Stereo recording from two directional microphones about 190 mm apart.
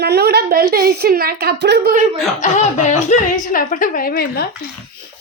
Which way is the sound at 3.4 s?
45° left (ahead or behind).